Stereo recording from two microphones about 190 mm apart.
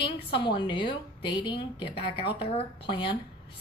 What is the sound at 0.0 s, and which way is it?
A woman's voice, 25° left (ahead or behind).